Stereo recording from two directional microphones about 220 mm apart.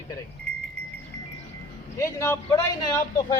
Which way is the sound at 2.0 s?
10° left (ahead or behind).